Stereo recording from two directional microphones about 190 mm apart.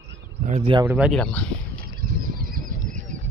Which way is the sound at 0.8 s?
10° right (ahead or behind).